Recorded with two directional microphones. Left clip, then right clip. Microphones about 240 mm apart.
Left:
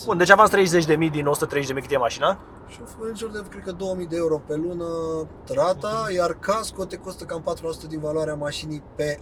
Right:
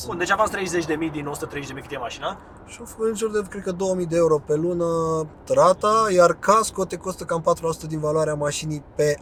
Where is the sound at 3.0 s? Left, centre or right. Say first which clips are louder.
Right 8 dB; right.